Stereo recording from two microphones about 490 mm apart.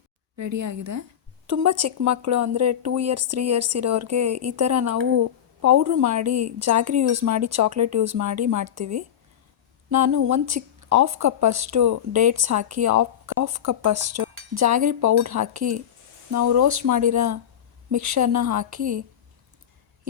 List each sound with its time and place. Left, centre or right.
0.3 s speech: right
9.9 s speech: right